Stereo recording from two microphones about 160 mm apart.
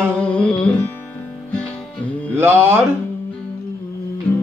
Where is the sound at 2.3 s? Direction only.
15° right (ahead or behind).